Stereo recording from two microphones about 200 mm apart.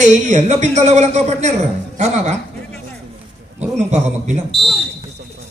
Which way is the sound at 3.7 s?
35° right (ahead or behind).